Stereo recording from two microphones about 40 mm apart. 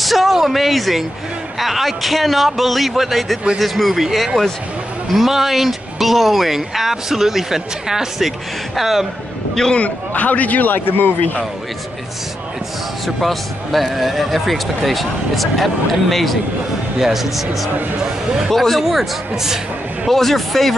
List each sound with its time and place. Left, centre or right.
0.0 s speech: centre
9.8 s a man's voice: left
13.0 s speech: centre
18.5 s speech: centre
20.1 s speech: centre